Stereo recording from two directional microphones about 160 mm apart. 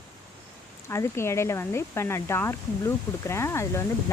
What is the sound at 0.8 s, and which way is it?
Speech, 15° left (ahead or behind).